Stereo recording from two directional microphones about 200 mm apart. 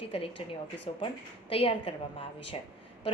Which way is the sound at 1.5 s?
25° left (ahead or behind).